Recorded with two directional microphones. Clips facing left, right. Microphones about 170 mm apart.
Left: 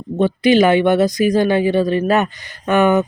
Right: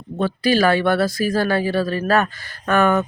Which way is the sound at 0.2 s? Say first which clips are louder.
Left 5 dB; 20° left (ahead or behind).